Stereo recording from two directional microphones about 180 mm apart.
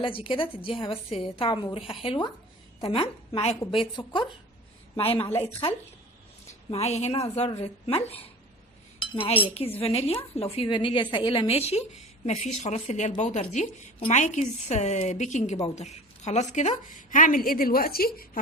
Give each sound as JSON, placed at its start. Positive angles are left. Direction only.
{"t": 0.0, "sound": "a woman's voice", "side_deg": 30}
{"t": 5.3, "sound": "speech", "side_deg": 10}
{"t": 6.5, "sound": "a woman's voice", "side_deg": 35}